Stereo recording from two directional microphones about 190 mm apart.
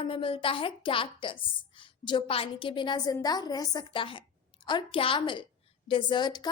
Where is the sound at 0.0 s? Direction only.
25° left (ahead or behind).